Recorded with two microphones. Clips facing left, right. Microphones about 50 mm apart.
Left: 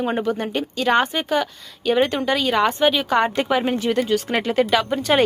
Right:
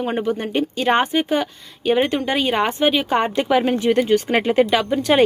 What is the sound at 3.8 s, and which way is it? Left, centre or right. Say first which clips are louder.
Speech: right 3 dB; centre.